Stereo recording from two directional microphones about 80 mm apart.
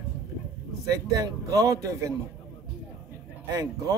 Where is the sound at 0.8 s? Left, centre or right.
Right.